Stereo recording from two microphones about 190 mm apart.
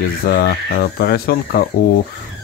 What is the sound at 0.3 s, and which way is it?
Speech, 55° left (ahead or behind).